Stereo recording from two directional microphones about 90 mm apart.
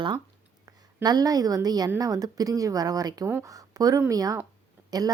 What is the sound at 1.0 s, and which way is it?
A woman's voice, 45° right (ahead or behind).